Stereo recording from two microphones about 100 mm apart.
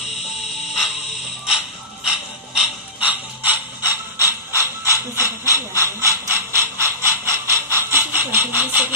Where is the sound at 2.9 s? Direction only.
15° right (ahead or behind).